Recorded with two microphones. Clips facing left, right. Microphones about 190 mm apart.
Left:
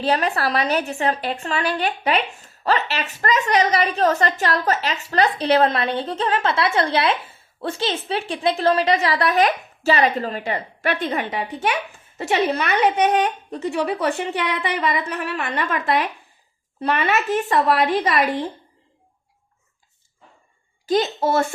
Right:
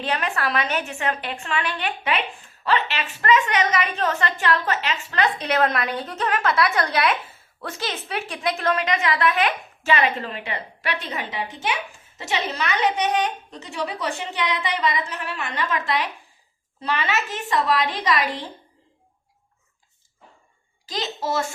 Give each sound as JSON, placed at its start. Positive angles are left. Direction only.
{"t": 0.0, "sound": "a woman's voice", "side_deg": 35}
{"t": 20.8, "sound": "a woman's voice", "side_deg": 55}